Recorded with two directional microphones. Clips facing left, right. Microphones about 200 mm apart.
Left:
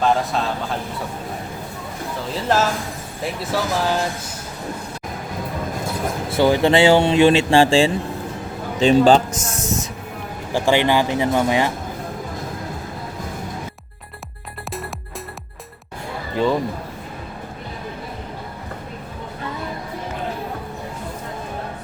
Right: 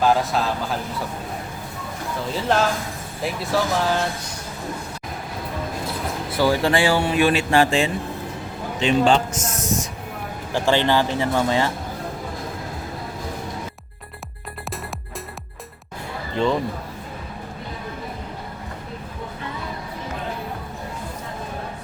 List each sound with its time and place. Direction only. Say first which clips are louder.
0.0 s speech: even; centre (ahead or behind)
2.3 s speech: left 1 dB; centre (ahead or behind)
6.3 s speech: left 4 dB; 20° left (ahead or behind)
10.5 s speech: left 2 dB; 15° left (ahead or behind)
16.3 s speech: left 2 dB; 5° left (ahead or behind)